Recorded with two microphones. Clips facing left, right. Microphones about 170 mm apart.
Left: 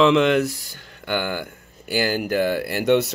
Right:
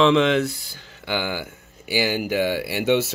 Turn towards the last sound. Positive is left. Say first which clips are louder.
# left 2 dB
turn(degrees=0)  # may be behind; listen again after turning